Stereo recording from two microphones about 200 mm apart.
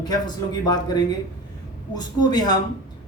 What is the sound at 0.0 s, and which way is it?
Speech, 20° left (ahead or behind).